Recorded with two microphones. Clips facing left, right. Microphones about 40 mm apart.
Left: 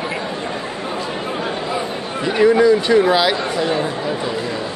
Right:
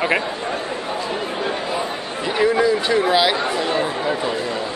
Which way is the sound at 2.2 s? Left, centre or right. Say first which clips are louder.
Left 4 dB; centre.